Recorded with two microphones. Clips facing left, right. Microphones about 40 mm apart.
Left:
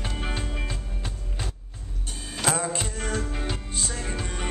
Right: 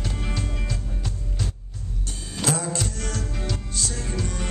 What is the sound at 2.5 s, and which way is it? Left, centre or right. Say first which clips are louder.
Music: even; left.